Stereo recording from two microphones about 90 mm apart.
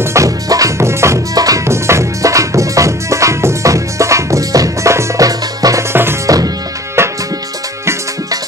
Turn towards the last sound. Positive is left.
turn(degrees=-30)  # may be behind; listen again after turning